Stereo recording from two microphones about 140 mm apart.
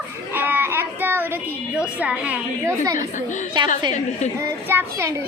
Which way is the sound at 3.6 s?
35° right (ahead or behind).